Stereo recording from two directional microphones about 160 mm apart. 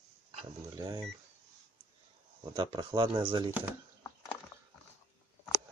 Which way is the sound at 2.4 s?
30° right (ahead or behind).